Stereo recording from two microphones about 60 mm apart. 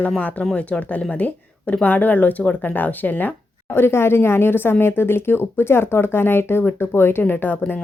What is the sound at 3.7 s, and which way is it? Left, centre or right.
Speech, left.